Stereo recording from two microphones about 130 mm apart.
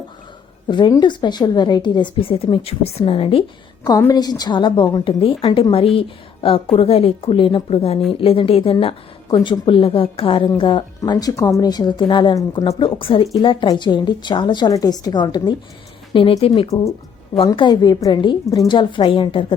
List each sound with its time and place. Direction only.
0.7 s speech: 35° left (ahead or behind)
4.1 s speech: 30° left (ahead or behind)
12.4 s speech: 25° left (ahead or behind)
12.8 s speech: 40° left (ahead or behind)
16.1 s speech: 45° left (ahead or behind)
16.6 s speech: 25° left (ahead or behind); by 19.5 s 40° left (ahead or behind)